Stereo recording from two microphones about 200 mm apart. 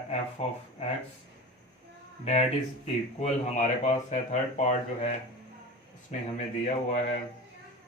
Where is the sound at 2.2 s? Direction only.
30° left (ahead or behind).